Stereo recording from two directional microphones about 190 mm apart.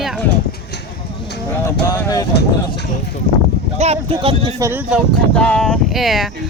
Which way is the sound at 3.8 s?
30° right (ahead or behind).